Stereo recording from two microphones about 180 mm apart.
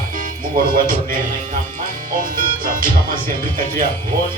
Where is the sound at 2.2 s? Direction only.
50° right (ahead or behind).